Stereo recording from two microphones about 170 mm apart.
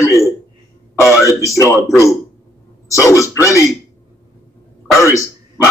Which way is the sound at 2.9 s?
20° left (ahead or behind).